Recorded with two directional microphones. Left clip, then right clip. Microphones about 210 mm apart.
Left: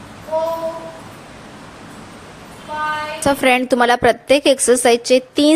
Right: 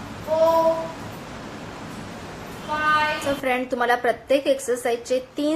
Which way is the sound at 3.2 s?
45° left (ahead or behind).